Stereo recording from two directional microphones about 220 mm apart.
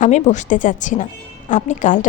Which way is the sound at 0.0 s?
35° left (ahead or behind).